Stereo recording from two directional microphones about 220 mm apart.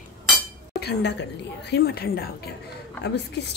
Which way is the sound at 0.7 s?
50° left (ahead or behind).